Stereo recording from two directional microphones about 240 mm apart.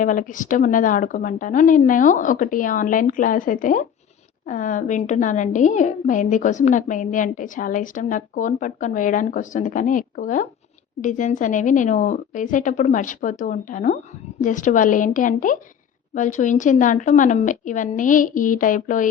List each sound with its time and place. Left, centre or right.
0.0 s a woman's voice: left